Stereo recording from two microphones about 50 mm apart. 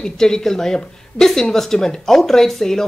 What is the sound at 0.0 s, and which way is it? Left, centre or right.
Speech, centre.